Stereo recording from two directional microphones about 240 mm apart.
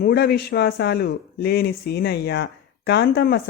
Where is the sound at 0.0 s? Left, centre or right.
Left.